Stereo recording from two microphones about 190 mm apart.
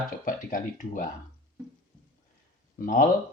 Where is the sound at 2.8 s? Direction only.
45° left (ahead or behind).